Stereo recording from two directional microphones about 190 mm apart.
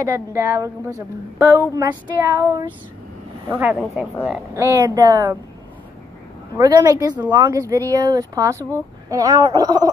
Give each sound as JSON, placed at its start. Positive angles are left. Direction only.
{"t": 0.3, "sound": "speech", "side_deg": -10}
{"t": 6.5, "sound": "speech", "side_deg": -20}